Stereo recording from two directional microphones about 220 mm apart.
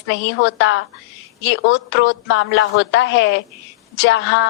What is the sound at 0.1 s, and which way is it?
A woman's voice, 55° left (ahead or behind).